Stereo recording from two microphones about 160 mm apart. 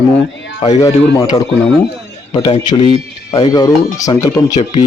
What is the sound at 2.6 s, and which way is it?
Speech, 30° left (ahead or behind).